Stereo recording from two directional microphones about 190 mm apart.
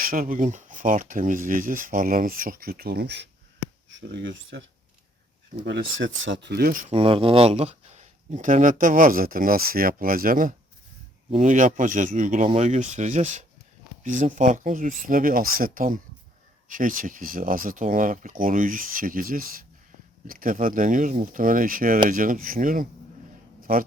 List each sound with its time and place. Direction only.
0.0 s speech: 50° right (ahead or behind)
3.9 s speech: 75° right (ahead or behind)
5.6 s speech: 75° right (ahead or behind); by 6.9 s 50° right (ahead or behind)
6.9 s speech: 30° right (ahead or behind); by 22.9 s 45° right (ahead or behind)